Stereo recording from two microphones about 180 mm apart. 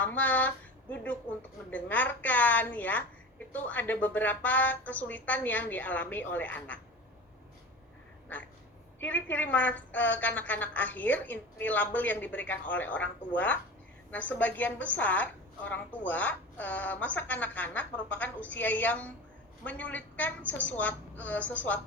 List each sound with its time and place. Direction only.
0.0 s a woman's voice: 10° left (ahead or behind)
8.3 s a woman's voice: 10° left (ahead or behind)